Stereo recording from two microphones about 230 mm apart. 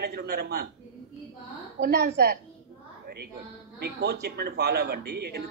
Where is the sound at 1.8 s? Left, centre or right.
Right.